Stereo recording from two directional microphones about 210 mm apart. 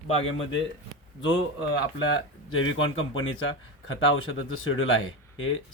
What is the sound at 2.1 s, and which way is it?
Speech, 65° left (ahead or behind).